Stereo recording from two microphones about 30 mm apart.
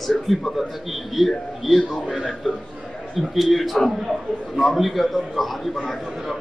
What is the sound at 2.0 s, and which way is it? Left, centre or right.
Speech, left.